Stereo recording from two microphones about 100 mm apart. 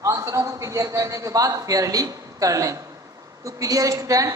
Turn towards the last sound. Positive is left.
turn(degrees=-35)  # may be behind; listen again after turning